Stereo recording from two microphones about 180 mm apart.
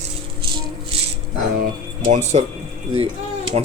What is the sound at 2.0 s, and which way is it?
Speech, 40° right (ahead or behind).